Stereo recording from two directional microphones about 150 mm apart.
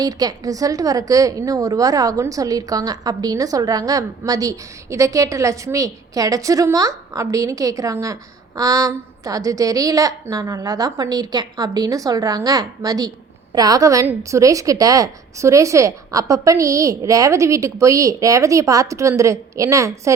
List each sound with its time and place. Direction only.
0.0 s a woman's voice: 25° right (ahead or behind)